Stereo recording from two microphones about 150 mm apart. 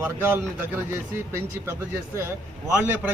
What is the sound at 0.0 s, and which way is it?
A man's voice, 15° right (ahead or behind).